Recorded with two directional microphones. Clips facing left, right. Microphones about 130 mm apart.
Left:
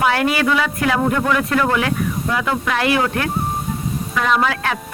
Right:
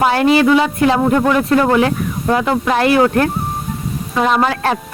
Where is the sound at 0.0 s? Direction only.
30° right (ahead or behind).